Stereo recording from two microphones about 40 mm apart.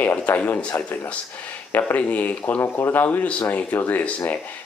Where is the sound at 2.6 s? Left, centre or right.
Left.